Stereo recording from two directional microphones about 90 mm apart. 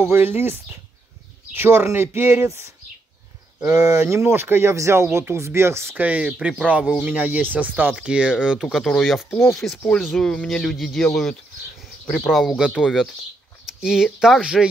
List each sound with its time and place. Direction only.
0.0 s speech: 25° right (ahead or behind)
3.6 s speech: 40° right (ahead or behind)
6.0 s speech: 10° right (ahead or behind)
8.7 s speech: centre (ahead or behind)